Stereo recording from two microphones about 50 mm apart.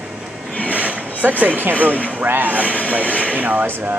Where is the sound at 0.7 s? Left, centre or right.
Right.